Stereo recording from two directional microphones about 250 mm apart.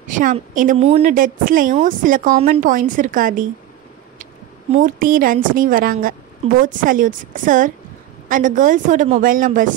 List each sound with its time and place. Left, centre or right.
0.0 s a woman's voice: right
4.7 s a woman's voice: right